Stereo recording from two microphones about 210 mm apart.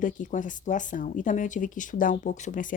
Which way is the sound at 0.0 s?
35° left (ahead or behind).